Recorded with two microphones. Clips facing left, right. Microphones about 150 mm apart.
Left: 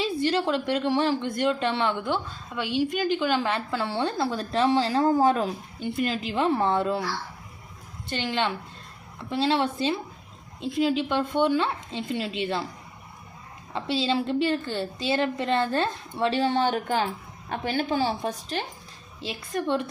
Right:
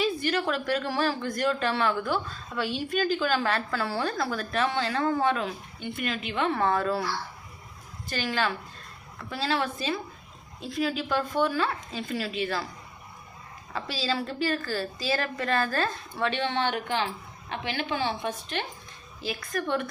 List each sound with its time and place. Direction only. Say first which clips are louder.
0.0 s a woman's voice: left 2 dB; 30° left (ahead or behind)
8.1 s a woman's voice: left 1 dB; 25° left (ahead or behind)
13.7 s a woman's voice: left 5 dB; 25° left (ahead or behind)